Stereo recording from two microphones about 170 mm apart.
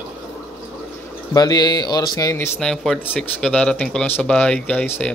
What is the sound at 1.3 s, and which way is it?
Speech, 25° left (ahead or behind).